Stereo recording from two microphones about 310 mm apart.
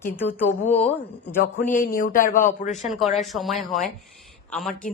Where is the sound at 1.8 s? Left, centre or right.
Left.